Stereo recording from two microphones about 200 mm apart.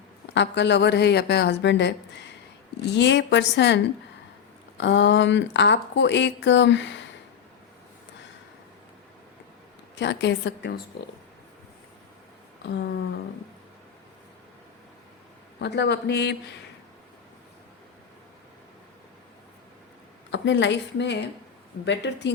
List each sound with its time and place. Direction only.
0.3 s speech: 60° left (ahead or behind)
4.8 s speech: 65° left (ahead or behind)
9.9 s speech: 60° left (ahead or behind)
15.5 s speech: 60° left (ahead or behind)
20.3 s speech: 65° left (ahead or behind)